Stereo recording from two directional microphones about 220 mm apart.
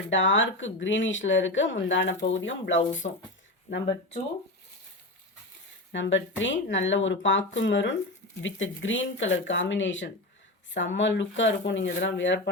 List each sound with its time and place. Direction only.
0.1 s speech: 60° left (ahead or behind)
3.0 s speech: 35° left (ahead or behind)
5.9 s speech: 55° left (ahead or behind)